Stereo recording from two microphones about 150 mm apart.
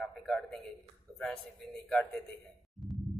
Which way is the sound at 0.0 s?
5° left (ahead or behind).